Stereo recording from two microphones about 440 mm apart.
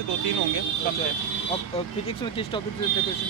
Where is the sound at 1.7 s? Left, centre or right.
Centre.